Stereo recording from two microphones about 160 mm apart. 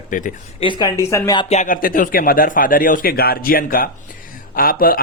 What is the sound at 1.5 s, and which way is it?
A man's voice, 55° left (ahead or behind).